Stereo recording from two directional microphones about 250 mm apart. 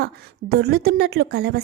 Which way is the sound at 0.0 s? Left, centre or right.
Right.